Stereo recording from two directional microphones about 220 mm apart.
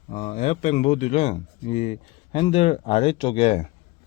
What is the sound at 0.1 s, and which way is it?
Speech, 30° left (ahead or behind).